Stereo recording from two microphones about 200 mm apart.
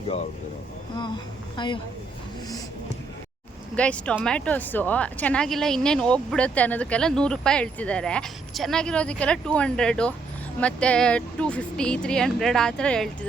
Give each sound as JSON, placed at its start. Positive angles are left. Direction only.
{"t": 1.5, "sound": "speech", "side_deg": 25}
{"t": 3.8, "sound": "speech", "side_deg": 5}